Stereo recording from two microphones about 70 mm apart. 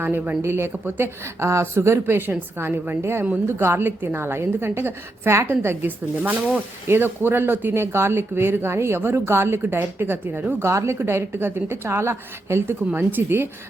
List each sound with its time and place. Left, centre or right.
0.0 s speech: right
10.7 s speech: right